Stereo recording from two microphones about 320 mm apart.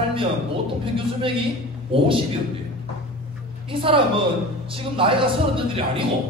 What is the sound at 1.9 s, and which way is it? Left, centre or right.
Speech, centre.